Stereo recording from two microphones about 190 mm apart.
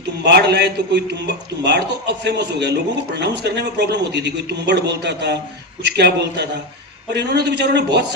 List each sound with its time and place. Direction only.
0.3 s a man's voice: 60° right (ahead or behind)